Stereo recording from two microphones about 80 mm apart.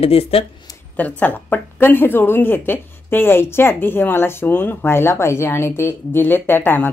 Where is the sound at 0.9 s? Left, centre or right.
Centre.